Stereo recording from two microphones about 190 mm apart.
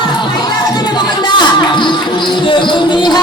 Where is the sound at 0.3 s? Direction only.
20° left (ahead or behind).